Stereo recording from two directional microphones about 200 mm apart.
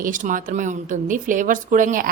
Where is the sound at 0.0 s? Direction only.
40° right (ahead or behind).